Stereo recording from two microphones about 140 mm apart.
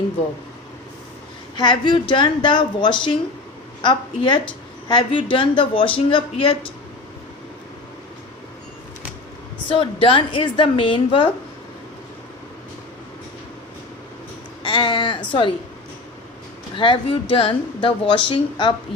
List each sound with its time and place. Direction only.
1.5 s a woman's voice: 35° left (ahead or behind)
9.6 s a woman's voice: 40° left (ahead or behind)
14.7 s a sound: 35° left (ahead or behind)
15.3 s a woman's voice: 35° left (ahead or behind)
16.7 s a woman's voice: 35° left (ahead or behind)